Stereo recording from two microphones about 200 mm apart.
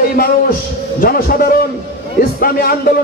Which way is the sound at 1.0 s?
45° left (ahead or behind).